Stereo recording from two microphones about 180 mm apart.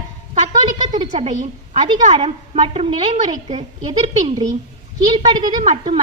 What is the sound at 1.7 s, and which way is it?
A woman's voice, 35° right (ahead or behind).